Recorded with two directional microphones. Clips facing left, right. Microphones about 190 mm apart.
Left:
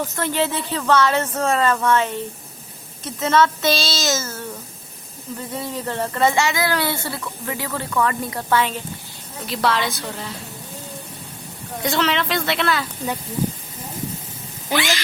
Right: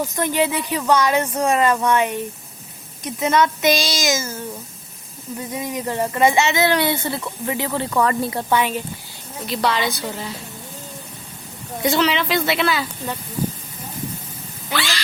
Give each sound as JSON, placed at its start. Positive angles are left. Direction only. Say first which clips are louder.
{"t": 0.0, "sound": "a woman's voice", "louder": "right 2 dB", "side_deg": -15}
{"t": 7.9, "sound": "speech", "louder": "right 1 dB", "side_deg": -35}
{"t": 8.4, "sound": "speech", "louder": "left 2 dB", "side_deg": -15}
{"t": 9.5, "sound": "a woman's voice", "louder": "even", "side_deg": 0}
{"t": 11.8, "sound": "a woman's voice", "louder": "right 2 dB", "side_deg": 0}
{"t": 14.7, "sound": "quack", "louder": "left 3 dB", "side_deg": 15}